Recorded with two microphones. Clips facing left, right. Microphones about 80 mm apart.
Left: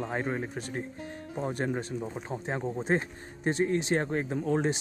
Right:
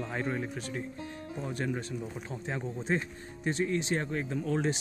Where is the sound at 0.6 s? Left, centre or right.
Left.